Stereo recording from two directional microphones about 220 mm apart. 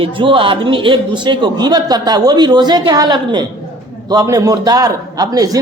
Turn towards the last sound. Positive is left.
turn(degrees=-15)  # may be behind; listen again after turning